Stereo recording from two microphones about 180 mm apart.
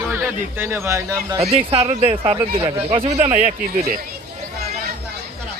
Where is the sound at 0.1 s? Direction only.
10° right (ahead or behind).